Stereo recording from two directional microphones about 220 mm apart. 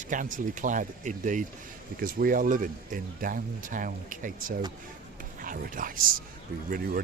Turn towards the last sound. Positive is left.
turn(degrees=-40)  # may be behind; listen again after turning